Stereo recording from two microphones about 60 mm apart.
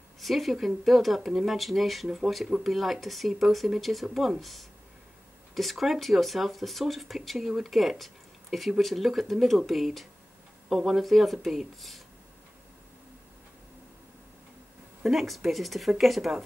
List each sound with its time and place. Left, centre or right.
0.2 s speech: centre
15.0 s speech: centre